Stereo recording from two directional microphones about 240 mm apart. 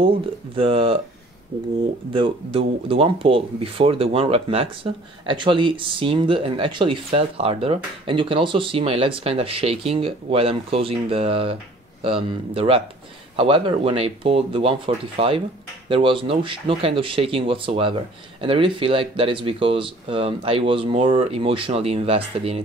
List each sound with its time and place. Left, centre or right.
0.0 s speech: right
2.1 s speech: right